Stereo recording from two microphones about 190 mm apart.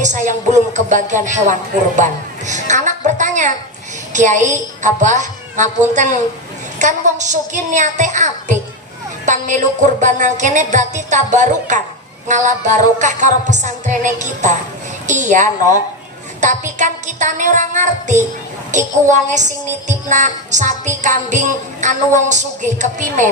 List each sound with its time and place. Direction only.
0.0 s music: 40° right (ahead or behind)